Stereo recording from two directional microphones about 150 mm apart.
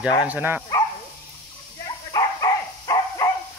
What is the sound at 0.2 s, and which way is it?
Speech, 10° right (ahead or behind).